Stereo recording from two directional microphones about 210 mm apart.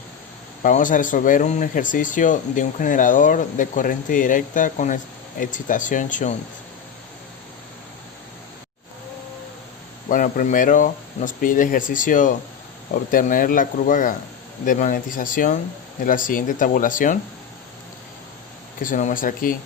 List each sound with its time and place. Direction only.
0.6 s speech: 40° left (ahead or behind)
10.1 s speech: 40° left (ahead or behind)
18.8 s speech: 40° left (ahead or behind)